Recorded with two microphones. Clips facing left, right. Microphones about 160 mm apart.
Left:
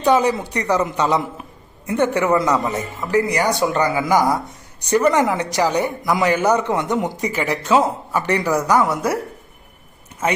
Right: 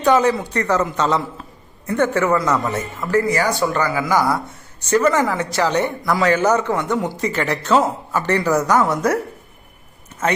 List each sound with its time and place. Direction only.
0.0 s speech: 10° left (ahead or behind)